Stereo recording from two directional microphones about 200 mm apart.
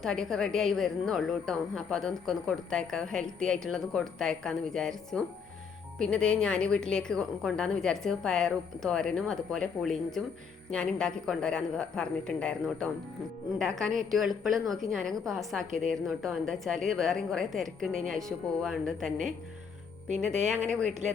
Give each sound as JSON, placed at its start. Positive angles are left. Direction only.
{"t": 0.0, "sound": "a woman's voice", "side_deg": 0}
{"t": 20.1, "sound": "speech", "side_deg": -35}